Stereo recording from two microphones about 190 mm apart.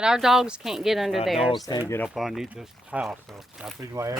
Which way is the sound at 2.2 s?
Centre (ahead or behind).